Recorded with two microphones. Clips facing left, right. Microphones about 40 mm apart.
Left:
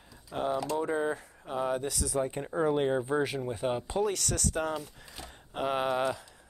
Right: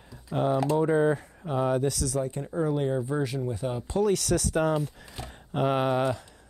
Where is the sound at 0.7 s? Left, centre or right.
Centre.